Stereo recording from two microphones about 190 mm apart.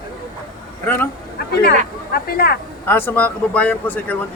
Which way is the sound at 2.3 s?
55° left (ahead or behind).